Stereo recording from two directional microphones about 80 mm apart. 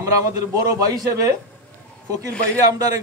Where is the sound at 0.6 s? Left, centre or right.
Right.